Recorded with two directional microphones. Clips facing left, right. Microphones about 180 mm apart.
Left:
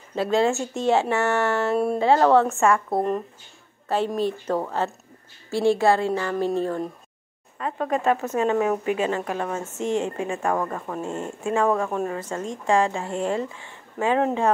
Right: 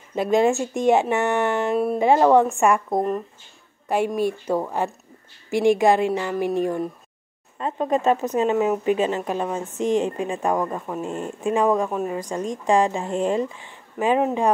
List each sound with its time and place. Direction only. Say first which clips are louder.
0.1 s speech: right 2 dB; 15° right (ahead or behind)
4.1 s speech: right 2 dB; 10° right (ahead or behind)